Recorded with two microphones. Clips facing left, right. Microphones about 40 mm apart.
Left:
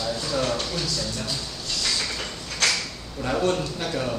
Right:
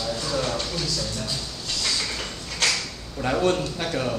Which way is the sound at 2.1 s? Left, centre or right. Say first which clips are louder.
Even; centre.